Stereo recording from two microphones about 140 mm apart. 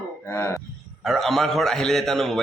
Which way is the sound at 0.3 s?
20° left (ahead or behind).